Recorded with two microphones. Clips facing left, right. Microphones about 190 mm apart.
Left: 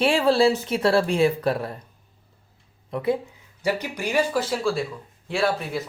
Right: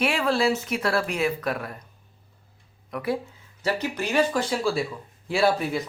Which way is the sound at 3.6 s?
15° left (ahead or behind).